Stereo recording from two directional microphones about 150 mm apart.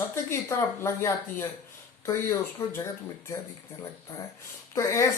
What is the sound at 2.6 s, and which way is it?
Speech, 15° left (ahead or behind).